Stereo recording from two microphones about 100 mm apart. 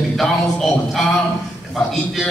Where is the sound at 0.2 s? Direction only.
Centre (ahead or behind).